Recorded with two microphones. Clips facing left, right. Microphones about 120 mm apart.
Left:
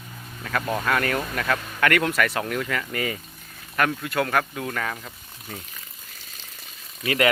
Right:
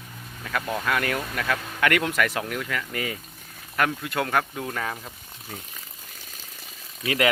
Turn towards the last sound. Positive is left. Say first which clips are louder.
# left 1 dB
turn(degrees=-10)  # may be behind; listen again after turning